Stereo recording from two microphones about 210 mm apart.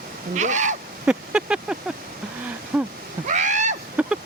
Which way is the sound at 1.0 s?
5° right (ahead or behind).